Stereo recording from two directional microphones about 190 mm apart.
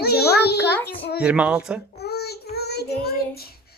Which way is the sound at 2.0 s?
60° left (ahead or behind).